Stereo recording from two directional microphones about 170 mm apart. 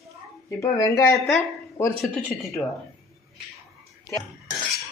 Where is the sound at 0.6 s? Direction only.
20° left (ahead or behind).